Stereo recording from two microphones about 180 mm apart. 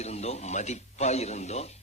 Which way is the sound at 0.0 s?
35° left (ahead or behind).